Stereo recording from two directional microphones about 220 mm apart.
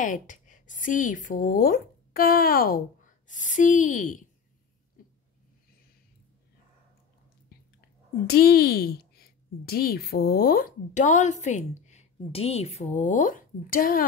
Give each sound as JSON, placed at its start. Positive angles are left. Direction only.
{"t": 0.0, "sound": "a woman's voice", "side_deg": 35}
{"t": 8.3, "sound": "a woman's voice", "side_deg": 45}